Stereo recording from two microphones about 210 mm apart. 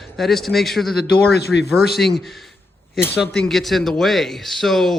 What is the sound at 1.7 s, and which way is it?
A man's voice, centre (ahead or behind).